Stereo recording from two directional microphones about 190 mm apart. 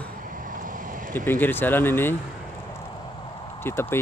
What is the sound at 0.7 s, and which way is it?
Vehicle, 45° right (ahead or behind).